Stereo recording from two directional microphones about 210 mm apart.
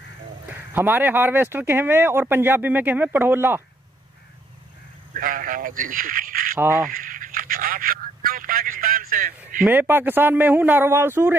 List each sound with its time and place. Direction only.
0.5 s speech: 10° right (ahead or behind)
5.1 s a sound: 40° right (ahead or behind)
6.9 s telephone: 40° right (ahead or behind)
9.7 s speech: 10° right (ahead or behind)